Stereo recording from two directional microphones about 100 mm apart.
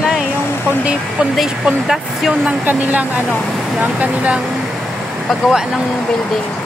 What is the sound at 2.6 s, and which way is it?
Speech, 15° right (ahead or behind).